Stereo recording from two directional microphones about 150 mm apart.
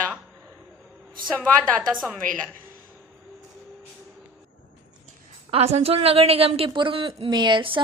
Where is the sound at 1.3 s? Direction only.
5° left (ahead or behind).